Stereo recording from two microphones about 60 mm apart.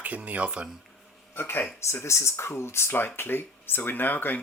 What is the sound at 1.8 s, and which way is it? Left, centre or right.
Speech, left.